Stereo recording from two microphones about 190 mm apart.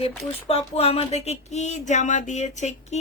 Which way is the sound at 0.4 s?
30° left (ahead or behind).